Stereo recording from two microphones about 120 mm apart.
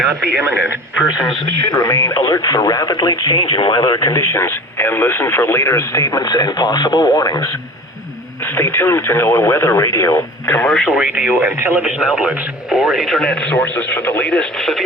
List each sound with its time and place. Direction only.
1.2 s speech: 30° left (ahead or behind)
8.5 s speech: 20° left (ahead or behind)
10.7 s speech: centre (ahead or behind)
10.9 s speech: 15° right (ahead or behind); by 14.8 s 5° left (ahead or behind)